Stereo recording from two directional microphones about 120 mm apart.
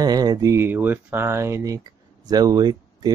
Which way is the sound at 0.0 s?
35° right (ahead or behind).